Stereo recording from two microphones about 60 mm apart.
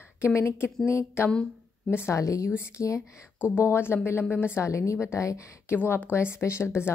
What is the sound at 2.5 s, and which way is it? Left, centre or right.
Speech, left.